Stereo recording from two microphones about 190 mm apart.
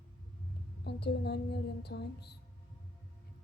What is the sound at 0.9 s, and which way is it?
Speech, 60° left (ahead or behind).